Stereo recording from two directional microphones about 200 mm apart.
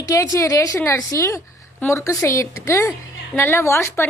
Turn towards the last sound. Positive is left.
turn(degrees=10)  # may be behind; listen again after turning